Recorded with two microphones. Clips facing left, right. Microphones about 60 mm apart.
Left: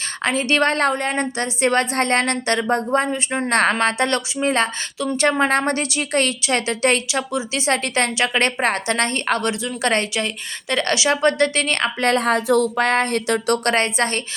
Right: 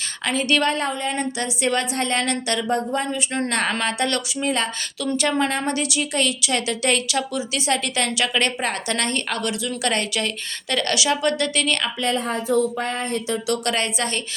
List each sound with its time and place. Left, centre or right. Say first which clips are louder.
0.3 s a woman's voice: left 1 dB; left
0.6 s a woman's voice: left 4 dB; left
5.5 s a woman's voice: left 4 dB; left
12.0 s speech: left 6 dB; left
13.5 s a woman's voice: left 4 dB; left